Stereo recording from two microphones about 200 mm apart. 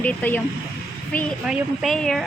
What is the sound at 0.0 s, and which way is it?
Speech, 10° left (ahead or behind).